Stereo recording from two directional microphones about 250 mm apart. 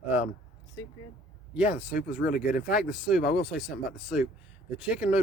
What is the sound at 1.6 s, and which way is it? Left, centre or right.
Speech, centre.